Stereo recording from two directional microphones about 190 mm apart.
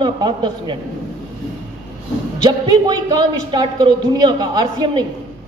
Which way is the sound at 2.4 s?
20° right (ahead or behind).